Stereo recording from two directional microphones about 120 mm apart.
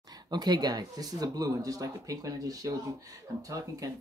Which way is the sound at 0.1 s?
35° right (ahead or behind).